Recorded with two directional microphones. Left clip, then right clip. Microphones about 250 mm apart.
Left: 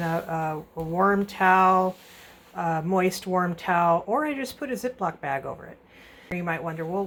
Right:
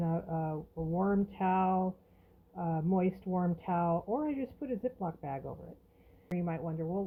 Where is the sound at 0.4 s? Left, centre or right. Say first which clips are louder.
Left 8 dB; left.